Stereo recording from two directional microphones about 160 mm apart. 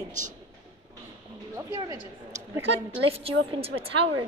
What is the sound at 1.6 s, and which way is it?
Speech, 20° right (ahead or behind).